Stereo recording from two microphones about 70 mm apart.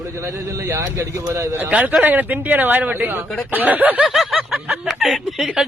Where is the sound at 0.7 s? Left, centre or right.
Right.